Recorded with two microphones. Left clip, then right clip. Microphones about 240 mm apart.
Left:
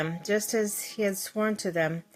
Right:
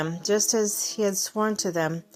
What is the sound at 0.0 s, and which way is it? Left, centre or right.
A woman's voice, centre.